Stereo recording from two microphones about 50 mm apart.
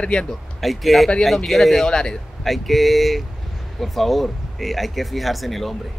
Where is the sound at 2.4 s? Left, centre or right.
Centre.